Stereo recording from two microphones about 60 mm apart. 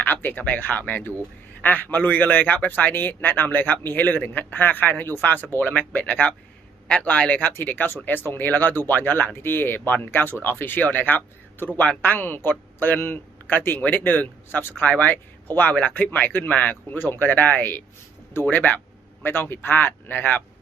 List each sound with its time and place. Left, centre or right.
0.0 s a man's voice: left